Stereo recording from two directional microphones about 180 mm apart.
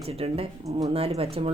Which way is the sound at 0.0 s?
35° right (ahead or behind).